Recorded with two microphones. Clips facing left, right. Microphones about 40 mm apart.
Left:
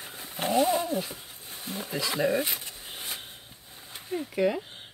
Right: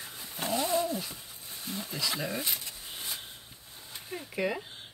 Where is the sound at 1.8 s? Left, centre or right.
Left.